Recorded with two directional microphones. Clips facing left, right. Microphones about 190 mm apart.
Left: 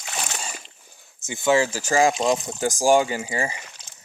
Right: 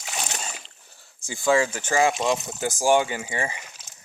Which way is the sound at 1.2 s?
20° left (ahead or behind).